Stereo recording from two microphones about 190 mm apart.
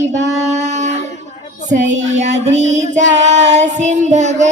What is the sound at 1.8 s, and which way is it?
A child's voice, 40° right (ahead or behind).